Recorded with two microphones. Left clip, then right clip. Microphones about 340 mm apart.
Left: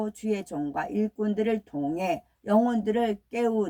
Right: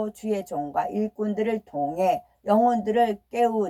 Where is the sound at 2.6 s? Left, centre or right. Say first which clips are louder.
Right 5 dB; centre.